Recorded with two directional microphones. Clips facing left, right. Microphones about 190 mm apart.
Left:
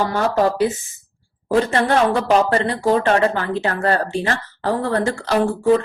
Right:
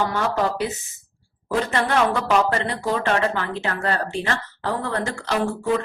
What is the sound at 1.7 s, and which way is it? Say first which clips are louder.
A woman's voice: left 4 dB; 35° left (ahead or behind).